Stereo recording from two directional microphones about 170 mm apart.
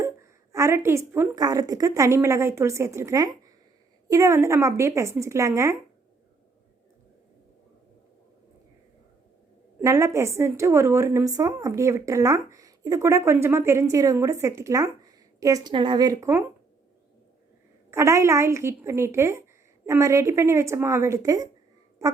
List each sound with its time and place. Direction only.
0.0 s a woman's voice: 15° right (ahead or behind)
9.8 s a woman's voice: 20° right (ahead or behind)
17.9 s a woman's voice: 15° right (ahead or behind)